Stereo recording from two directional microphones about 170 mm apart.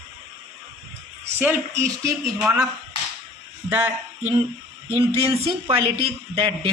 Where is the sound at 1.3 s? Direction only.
15° right (ahead or behind).